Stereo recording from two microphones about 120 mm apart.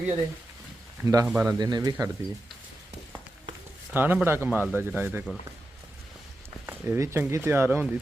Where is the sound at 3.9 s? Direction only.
15° right (ahead or behind).